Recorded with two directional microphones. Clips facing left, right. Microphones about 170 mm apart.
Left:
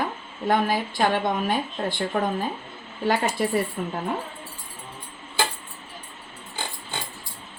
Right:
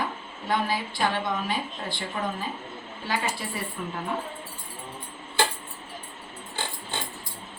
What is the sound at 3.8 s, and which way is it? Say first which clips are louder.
Speech: left 4 dB; 45° left (ahead or behind).